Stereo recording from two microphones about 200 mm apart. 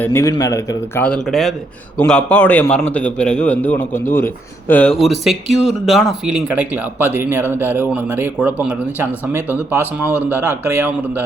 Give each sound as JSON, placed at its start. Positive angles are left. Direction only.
{"t": 0.0, "sound": "a man's voice", "side_deg": 15}
{"t": 10.6, "sound": "a man's voice", "side_deg": -10}